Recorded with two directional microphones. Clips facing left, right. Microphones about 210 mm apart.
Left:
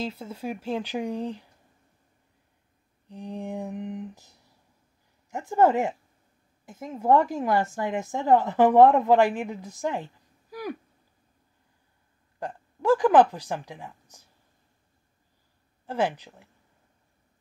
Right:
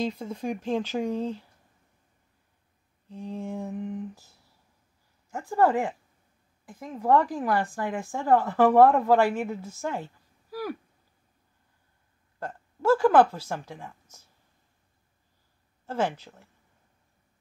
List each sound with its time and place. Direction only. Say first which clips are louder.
0.0 s speech: right 3 dB; 5° left (ahead or behind)
3.1 s a woman's voice: even; 15° left (ahead or behind)
10.5 s a sound: right 1 dB; 15° left (ahead or behind)
12.4 s speech: left 2 dB; 15° left (ahead or behind)
15.9 s speech: left 1 dB; 10° left (ahead or behind)